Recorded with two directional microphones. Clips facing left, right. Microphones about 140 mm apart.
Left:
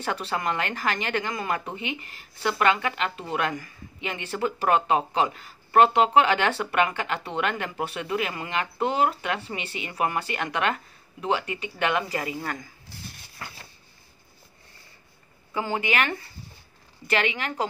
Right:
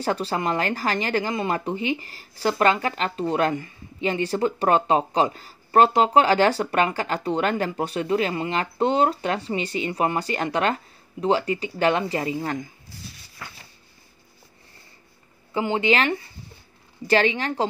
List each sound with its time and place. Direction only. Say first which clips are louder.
0.0 s speech: right 4 dB; 35° right (ahead or behind)
15.5 s speech: right 5 dB; 25° right (ahead or behind)